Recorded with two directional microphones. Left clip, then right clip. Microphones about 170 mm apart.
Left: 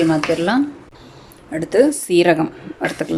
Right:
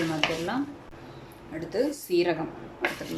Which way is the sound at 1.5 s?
50° left (ahead or behind).